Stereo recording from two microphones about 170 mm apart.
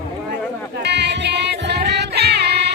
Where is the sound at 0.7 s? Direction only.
85° right.